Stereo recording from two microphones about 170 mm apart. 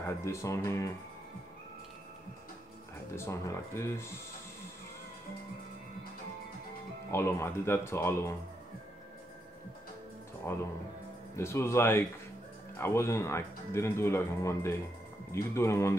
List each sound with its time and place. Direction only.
0.0 s speech: 15° left (ahead or behind)
3.2 s speech: 15° left (ahead or behind)
7.1 s speech: 15° left (ahead or behind)
10.5 s speech: 15° left (ahead or behind)